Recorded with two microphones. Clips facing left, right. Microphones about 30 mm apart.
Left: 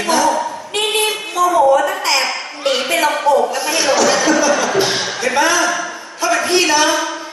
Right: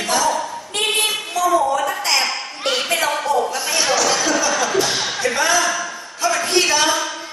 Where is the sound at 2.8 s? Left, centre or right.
Centre.